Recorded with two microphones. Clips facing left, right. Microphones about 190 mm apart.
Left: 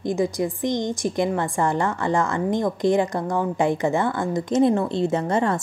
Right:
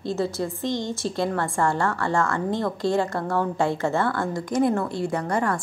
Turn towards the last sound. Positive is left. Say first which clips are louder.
# left 3 dB
turn(degrees=25)  # may be behind; listen again after turning